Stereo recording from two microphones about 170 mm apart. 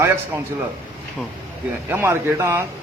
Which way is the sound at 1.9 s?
15° right (ahead or behind).